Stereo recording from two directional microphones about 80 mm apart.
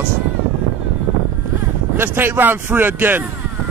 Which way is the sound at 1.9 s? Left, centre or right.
Right.